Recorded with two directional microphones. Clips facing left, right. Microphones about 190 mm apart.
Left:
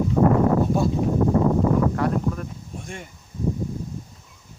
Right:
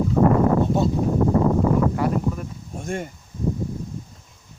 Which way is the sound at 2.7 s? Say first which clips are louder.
Right 10 dB; 45° right (ahead or behind).